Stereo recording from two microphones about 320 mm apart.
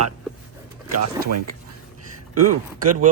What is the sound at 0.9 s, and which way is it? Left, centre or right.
Speech, right.